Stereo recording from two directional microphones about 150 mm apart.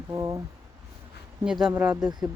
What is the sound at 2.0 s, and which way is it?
Speech, 25° right (ahead or behind).